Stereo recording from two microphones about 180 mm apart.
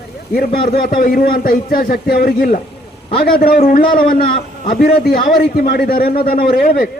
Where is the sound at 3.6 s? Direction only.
50° left (ahead or behind).